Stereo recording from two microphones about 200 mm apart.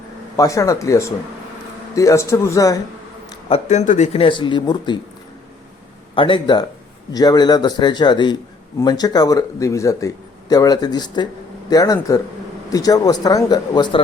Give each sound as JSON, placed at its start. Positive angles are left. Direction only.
{"t": 0.3, "sound": "speech", "side_deg": 15}
{"t": 3.5, "sound": "speech", "side_deg": 35}
{"t": 6.1, "sound": "speech", "side_deg": 25}